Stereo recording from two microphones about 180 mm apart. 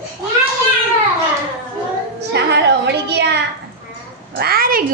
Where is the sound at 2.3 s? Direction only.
70° right (ahead or behind).